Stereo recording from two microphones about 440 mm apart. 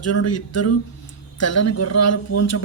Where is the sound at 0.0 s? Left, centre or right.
Left.